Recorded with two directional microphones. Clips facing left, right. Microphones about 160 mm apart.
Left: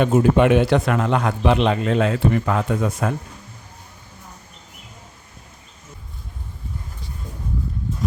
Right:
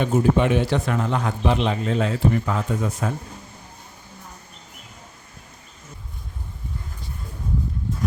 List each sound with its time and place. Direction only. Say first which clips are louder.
0.0 s a man's voice: left 4 dB; 70° left (ahead or behind)